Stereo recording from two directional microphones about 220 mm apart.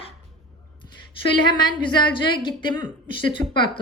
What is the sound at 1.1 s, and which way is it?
A woman's voice, 20° left (ahead or behind).